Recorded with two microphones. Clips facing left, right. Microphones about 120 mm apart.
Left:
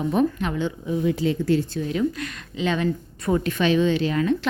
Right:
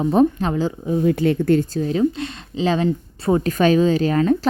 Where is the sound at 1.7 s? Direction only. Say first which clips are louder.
Right 5 dB; 35° right (ahead or behind).